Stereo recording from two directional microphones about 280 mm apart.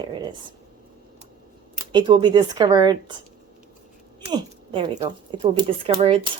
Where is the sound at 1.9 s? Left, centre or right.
Centre.